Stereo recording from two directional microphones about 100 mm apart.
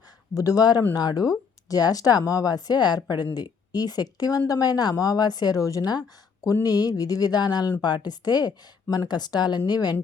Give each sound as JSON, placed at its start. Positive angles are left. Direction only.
{"t": 0.3, "sound": "speech", "side_deg": 35}